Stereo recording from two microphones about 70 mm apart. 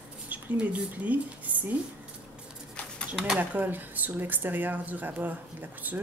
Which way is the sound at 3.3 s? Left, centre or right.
Right.